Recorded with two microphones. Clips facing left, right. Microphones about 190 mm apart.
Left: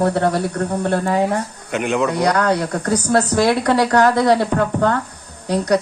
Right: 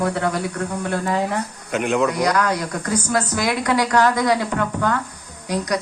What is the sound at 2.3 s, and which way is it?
Speech, 35° left (ahead or behind).